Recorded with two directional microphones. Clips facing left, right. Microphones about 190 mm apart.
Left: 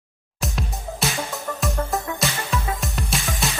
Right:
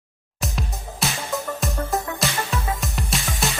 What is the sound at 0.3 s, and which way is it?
Music, centre (ahead or behind).